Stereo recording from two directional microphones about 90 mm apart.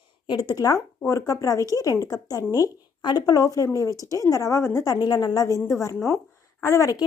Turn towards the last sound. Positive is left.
turn(degrees=35)  # may be behind; listen again after turning